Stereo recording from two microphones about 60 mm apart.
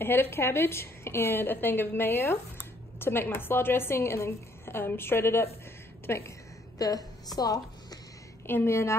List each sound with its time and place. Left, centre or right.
0.0 s a woman's voice: left
6.8 s a woman's voice: left
7.3 s a sound: left
8.5 s a woman's voice: left